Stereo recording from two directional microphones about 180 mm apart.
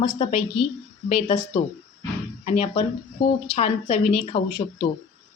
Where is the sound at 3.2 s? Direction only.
60° left (ahead or behind).